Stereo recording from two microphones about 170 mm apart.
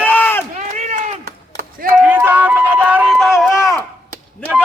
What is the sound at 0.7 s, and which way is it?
Run, 45° right (ahead or behind).